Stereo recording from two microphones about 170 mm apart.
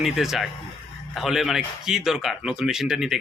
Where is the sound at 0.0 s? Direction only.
Centre (ahead or behind).